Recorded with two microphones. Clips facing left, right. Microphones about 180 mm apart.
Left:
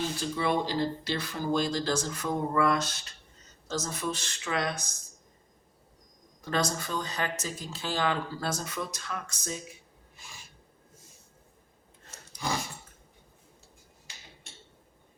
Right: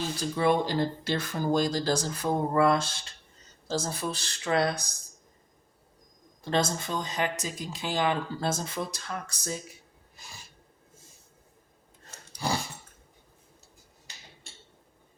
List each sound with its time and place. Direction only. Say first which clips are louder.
0.2 s speech: right 6 dB; 50° right (ahead or behind)
6.4 s speech: right 2 dB; 25° right (ahead or behind)
12.4 s speech: right 2 dB; 35° right (ahead or behind)